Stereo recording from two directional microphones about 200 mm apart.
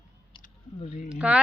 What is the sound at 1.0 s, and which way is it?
Bird, 5° right (ahead or behind).